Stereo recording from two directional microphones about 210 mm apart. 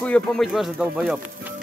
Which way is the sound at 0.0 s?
5° left (ahead or behind).